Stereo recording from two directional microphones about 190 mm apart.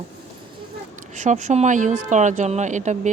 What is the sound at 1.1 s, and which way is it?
A woman's voice, 40° right (ahead or behind).